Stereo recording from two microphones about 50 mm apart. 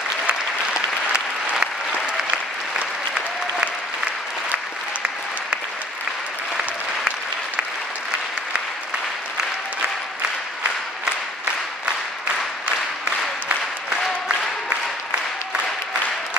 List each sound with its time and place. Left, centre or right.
1.5 s applause: right
13.0 s applause: right